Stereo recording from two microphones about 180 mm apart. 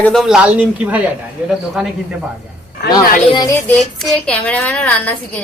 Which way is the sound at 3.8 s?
5° left (ahead or behind).